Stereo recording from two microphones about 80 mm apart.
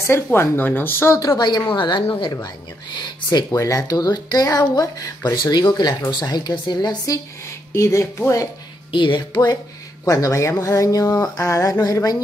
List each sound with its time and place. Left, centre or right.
0.0 s speech: left
1.2 s speech: left
1.7 s speech: left
3.3 s speech: left
7.7 s speech: left
8.9 s speech: left
10.0 s speech: left
11.8 s speech: left